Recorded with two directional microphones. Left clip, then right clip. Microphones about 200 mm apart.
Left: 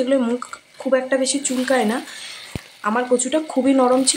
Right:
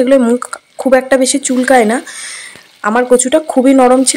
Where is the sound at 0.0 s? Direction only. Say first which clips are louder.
Right 10 dB; 35° right (ahead or behind).